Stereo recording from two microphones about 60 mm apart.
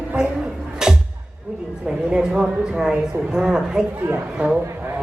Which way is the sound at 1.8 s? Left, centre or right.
Centre.